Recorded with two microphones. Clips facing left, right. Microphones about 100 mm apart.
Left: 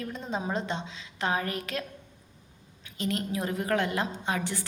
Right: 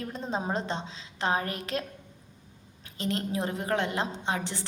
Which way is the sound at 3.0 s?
30° right (ahead or behind).